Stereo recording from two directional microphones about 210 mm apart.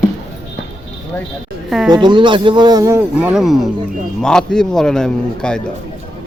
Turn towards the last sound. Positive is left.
turn(degrees=5)  # may be behind; listen again after turning